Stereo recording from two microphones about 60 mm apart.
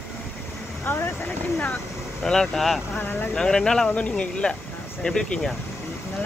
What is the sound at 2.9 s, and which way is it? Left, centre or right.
Vehicle, left.